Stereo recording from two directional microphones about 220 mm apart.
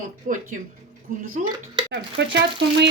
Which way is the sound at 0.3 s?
35° right (ahead or behind).